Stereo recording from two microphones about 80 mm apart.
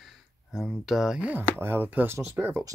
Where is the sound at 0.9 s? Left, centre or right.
Centre.